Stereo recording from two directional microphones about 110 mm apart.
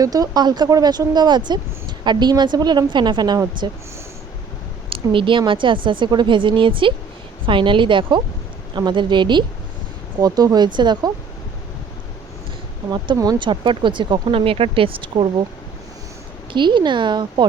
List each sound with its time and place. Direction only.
0.0 s a woman's voice: 35° right (ahead or behind)
4.9 s a woman's voice: 50° right (ahead or behind)
13.4 s a woman's voice: 45° right (ahead or behind)
16.5 s a woman's voice: 45° right (ahead or behind)